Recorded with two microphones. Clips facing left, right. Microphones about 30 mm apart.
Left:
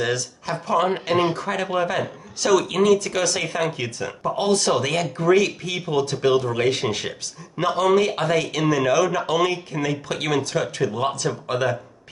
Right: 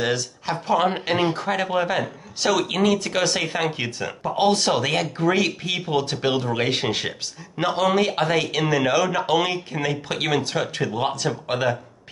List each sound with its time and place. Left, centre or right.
0.0 s speech: centre